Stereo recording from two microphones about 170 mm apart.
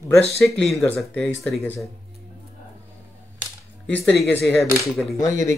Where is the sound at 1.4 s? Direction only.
Centre (ahead or behind).